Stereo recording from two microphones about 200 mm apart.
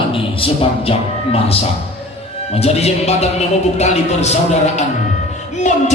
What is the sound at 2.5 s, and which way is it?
A man's voice, 30° left (ahead or behind).